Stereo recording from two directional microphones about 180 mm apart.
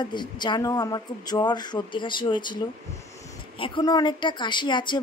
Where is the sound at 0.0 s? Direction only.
25° left (ahead or behind).